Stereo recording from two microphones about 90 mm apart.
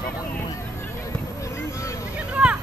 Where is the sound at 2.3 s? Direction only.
15° right (ahead or behind).